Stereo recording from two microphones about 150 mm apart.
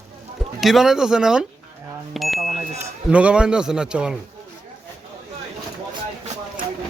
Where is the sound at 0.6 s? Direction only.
Centre (ahead or behind).